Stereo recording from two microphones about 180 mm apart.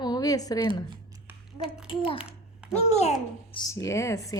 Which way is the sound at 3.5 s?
25° left (ahead or behind).